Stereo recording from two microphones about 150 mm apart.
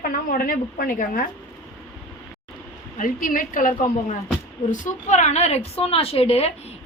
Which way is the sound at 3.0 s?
60° left (ahead or behind).